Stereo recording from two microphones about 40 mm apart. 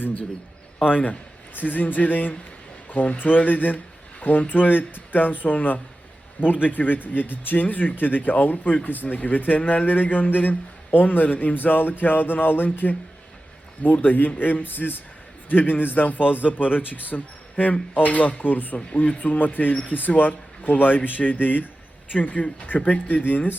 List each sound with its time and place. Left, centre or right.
0.0 s a man's voice: left
22.1 s speech: left